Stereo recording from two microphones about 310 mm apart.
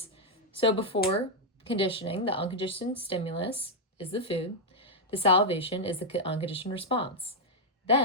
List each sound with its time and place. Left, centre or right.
0.6 s speech: centre